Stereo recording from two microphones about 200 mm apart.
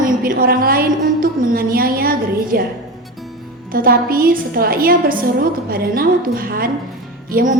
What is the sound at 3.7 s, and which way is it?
A woman's voice, 45° right (ahead or behind).